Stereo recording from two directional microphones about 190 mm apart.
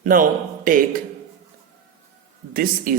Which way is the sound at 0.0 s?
45° right (ahead or behind).